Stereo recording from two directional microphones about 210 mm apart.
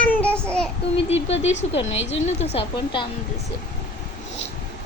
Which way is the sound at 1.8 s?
65° left (ahead or behind).